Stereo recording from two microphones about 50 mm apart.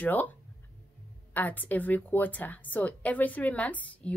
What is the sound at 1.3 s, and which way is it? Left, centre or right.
A woman's voice, left.